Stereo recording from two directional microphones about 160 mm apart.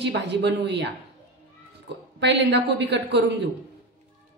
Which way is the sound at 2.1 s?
90° right.